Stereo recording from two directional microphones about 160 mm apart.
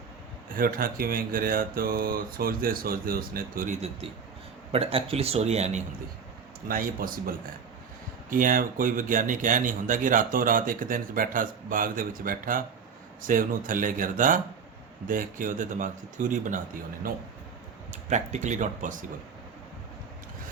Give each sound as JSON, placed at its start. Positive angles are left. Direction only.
{"t": 0.5, "sound": "speech", "side_deg": -65}
{"t": 3.8, "sound": "speech", "side_deg": -40}
{"t": 6.7, "sound": "speech", "side_deg": -60}
{"t": 17.9, "sound": "speech", "side_deg": -45}